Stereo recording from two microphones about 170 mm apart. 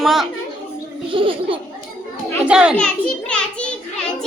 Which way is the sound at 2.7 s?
5° left (ahead or behind).